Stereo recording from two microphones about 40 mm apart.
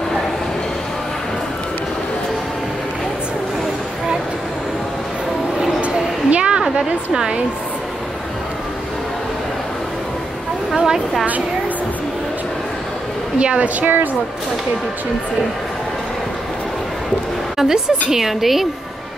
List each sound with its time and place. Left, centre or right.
5.8 s a sound: right
6.6 s a woman's voice: centre
10.7 s vehicle: centre
13.4 s a woman's voice: right
13.7 s speech: right
17.6 s a woman's voice: centre